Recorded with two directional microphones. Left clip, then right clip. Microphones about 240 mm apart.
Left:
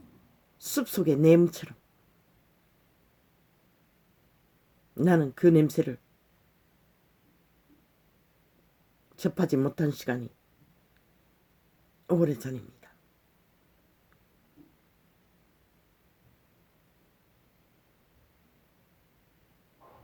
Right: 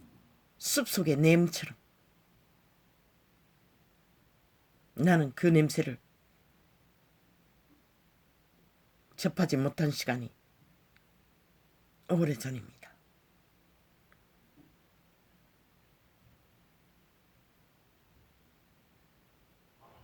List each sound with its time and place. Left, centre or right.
0.6 s speech: right
4.9 s speech: right
9.1 s speech: right
12.1 s speech: right